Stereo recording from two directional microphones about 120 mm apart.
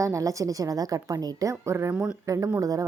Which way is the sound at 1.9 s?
5° right (ahead or behind).